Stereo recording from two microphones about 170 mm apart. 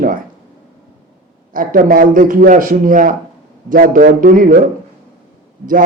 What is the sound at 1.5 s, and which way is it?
A man's voice, 55° right (ahead or behind).